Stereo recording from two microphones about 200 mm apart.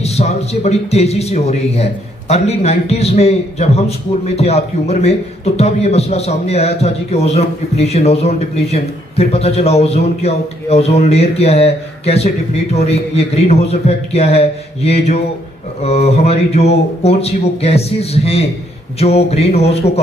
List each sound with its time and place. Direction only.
0.0 s a man's voice: 30° left (ahead or behind)